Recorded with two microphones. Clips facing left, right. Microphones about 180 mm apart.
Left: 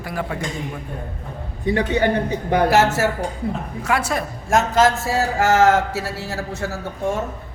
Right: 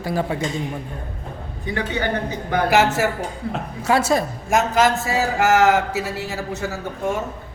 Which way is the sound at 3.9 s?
25° right (ahead or behind).